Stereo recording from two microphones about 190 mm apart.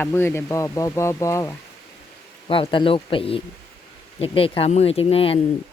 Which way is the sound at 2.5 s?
25° left (ahead or behind).